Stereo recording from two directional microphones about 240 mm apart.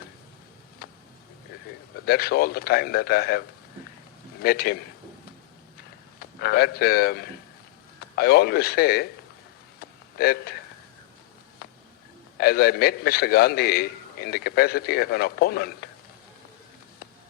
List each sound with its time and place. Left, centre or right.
0.8 s a sound: left
2.0 s a man's voice: left
4.4 s a man's voice: left
6.1 s a man's voice: left
11.6 s a sound: left
12.4 s a man's voice: left